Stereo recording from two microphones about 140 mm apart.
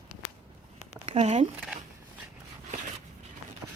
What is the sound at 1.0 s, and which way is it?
Speech, 55° right (ahead or behind).